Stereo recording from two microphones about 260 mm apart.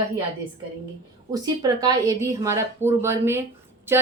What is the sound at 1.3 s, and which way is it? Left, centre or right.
Speech, centre.